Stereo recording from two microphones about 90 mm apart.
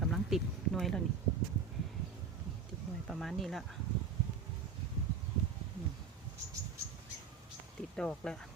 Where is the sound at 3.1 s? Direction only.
Centre (ahead or behind).